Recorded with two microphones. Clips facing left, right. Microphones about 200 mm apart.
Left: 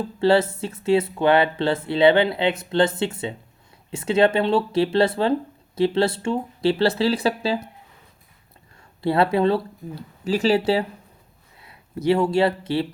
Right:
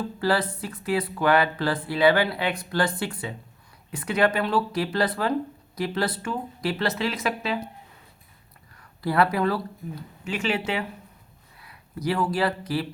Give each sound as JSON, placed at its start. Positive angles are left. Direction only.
{"t": 0.2, "sound": "speech", "side_deg": 25}
{"t": 8.7, "sound": "speech", "side_deg": 25}